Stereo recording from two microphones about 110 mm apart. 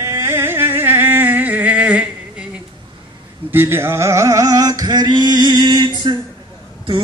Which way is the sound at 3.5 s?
20° right (ahead or behind).